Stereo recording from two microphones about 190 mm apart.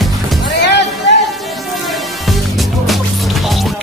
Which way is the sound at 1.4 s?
Centre (ahead or behind).